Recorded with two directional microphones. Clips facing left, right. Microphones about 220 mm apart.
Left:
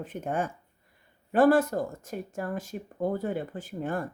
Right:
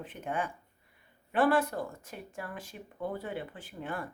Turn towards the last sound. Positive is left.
turn(degrees=45)  # may be behind; listen again after turning